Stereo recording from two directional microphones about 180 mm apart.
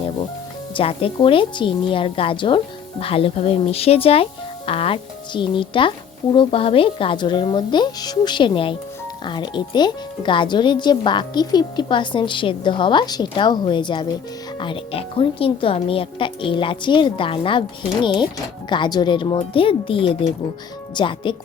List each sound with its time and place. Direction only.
0.7 s speech: 30° left (ahead or behind)